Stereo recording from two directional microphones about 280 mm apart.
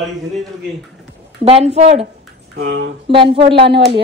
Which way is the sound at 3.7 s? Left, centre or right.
Right.